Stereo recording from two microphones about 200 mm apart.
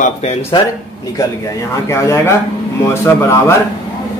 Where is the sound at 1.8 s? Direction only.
15° left (ahead or behind).